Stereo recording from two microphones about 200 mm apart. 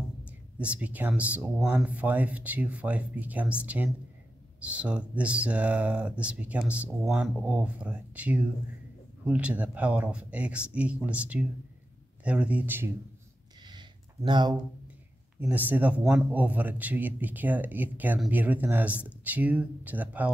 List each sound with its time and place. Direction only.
0.6 s speech: 5° right (ahead or behind)
13.7 s a sound: 20° right (ahead or behind)
15.4 s speech: 10° right (ahead or behind)